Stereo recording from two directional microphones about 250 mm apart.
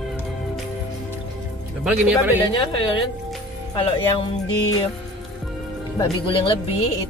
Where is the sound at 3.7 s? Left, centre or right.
Centre.